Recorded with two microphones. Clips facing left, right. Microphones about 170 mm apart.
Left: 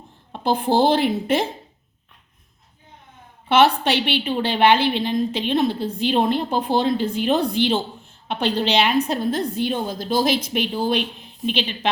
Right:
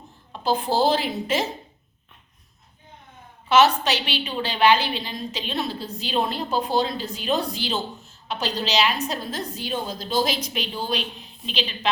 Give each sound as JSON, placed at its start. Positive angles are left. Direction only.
{"t": 0.3, "sound": "a woman's voice", "side_deg": 55}
{"t": 3.5, "sound": "a woman's voice", "side_deg": 60}